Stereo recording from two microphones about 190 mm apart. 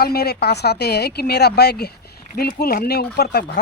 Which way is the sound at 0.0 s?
55° left (ahead or behind).